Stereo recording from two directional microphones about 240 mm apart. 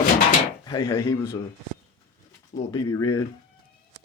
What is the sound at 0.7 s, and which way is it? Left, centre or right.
Speech, centre.